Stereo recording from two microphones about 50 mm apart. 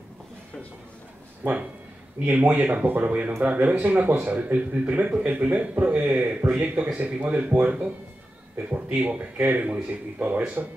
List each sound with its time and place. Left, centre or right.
1.4 s speech: right